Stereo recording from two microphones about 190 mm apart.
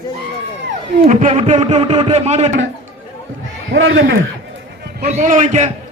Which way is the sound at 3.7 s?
75° right (ahead or behind).